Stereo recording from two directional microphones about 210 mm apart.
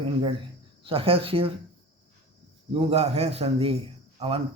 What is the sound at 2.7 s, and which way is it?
A man's voice, 30° right (ahead or behind).